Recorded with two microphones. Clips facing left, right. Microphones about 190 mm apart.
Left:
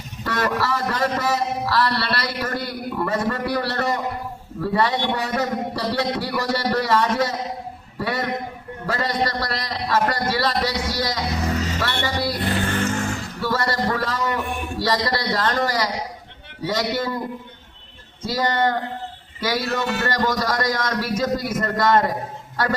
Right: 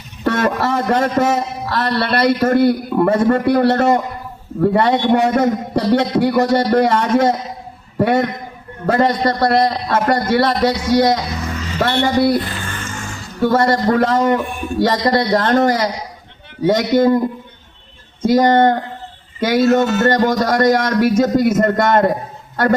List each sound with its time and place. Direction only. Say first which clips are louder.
0.6 s a sound: right 6 dB; 25° right (ahead or behind)
1.0 s a man's voice: right 6 dB; 50° right (ahead or behind)
11.4 s vehicle: left 1 dB; 40° left (ahead or behind)
11.8 s a man's voice: right 9 dB; 50° right (ahead or behind)
12.4 s music: left 4 dB; 60° left (ahead or behind)
13.4 s a man's voice: right 9 dB; 50° right (ahead or behind)
18.2 s a man's voice: right 10 dB; 50° right (ahead or behind)